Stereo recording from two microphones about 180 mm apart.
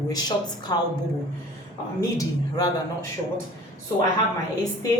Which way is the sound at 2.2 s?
20° left (ahead or behind).